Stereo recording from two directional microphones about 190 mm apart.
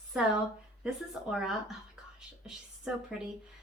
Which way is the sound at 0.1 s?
5° right (ahead or behind).